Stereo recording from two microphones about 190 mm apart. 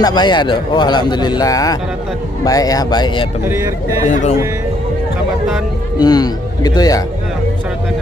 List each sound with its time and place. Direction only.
0.0 s speech: 20° left (ahead or behind)
3.4 s speech: 10° right (ahead or behind)
4.0 s a man's voice: 40° left (ahead or behind)
5.9 s speech: 20° left (ahead or behind)